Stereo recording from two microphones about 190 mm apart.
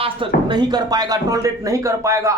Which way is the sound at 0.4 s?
20° right (ahead or behind).